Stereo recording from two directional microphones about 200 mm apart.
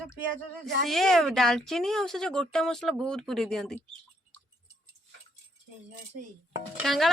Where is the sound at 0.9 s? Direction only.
Centre (ahead or behind).